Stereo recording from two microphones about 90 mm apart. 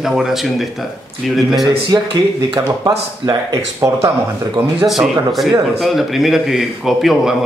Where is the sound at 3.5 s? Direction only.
35° right (ahead or behind).